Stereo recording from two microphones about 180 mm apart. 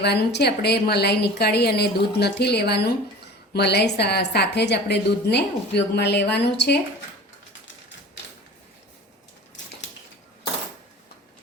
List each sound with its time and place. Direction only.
0.0 s a woman's voice: 65° left (ahead or behind)